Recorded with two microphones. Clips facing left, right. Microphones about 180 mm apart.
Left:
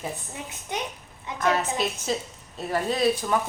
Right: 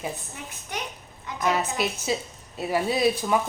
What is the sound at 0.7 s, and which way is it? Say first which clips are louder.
Speech: left 3 dB; 20° left (ahead or behind).